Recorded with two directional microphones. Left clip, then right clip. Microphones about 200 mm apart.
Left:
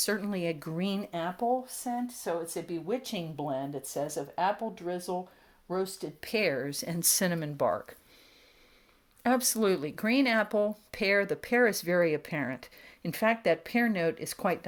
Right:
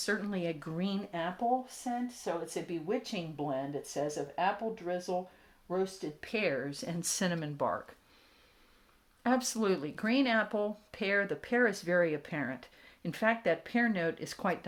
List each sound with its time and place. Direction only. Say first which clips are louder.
0.0 s speech: left 3 dB; 40° left (ahead or behind)
9.2 s speech: left 4 dB; 35° left (ahead or behind)